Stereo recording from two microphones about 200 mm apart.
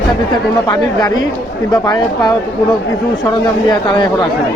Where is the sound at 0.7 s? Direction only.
20° left (ahead or behind).